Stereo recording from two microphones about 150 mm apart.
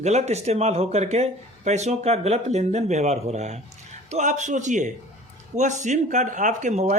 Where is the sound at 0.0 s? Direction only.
50° right (ahead or behind).